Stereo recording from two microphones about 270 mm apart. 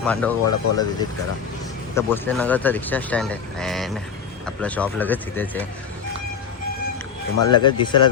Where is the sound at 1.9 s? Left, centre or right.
Centre.